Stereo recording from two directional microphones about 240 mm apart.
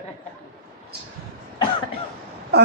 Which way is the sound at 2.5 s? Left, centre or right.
Right.